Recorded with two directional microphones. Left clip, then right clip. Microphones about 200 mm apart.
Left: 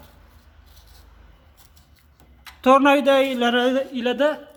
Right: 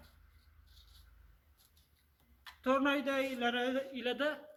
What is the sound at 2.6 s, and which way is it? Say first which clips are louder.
A man's voice: left 17 dB; 60° left (ahead or behind).